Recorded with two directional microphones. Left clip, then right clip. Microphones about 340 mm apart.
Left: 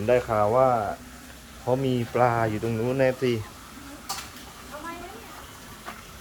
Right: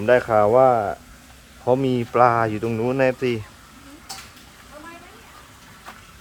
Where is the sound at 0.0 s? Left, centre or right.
Centre.